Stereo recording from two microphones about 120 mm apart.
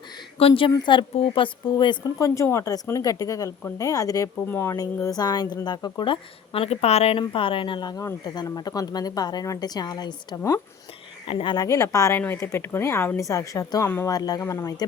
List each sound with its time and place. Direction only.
0.3 s a woman's voice: 50° left (ahead or behind)
2.2 s speech: 25° left (ahead or behind)
11.3 s a woman's voice: 45° left (ahead or behind)
11.5 s speech: 30° left (ahead or behind)
14.2 s speech: 30° left (ahead or behind)